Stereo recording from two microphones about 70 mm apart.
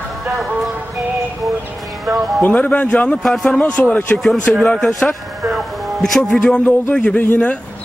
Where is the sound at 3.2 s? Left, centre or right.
Centre.